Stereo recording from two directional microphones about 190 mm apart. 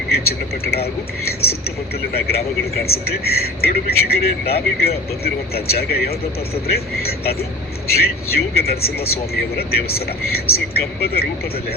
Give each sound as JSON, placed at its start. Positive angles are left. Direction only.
{"t": 0.1, "sound": "a man's voice", "side_deg": 55}